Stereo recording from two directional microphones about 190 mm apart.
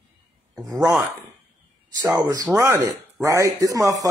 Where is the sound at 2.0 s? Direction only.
20° right (ahead or behind).